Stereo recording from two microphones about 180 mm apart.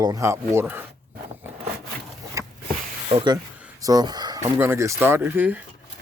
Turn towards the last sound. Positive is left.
turn(degrees=-10)  # may be behind; listen again after turning